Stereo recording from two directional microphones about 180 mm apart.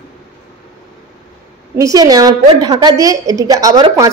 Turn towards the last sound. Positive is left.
turn(degrees=-20)  # may be behind; listen again after turning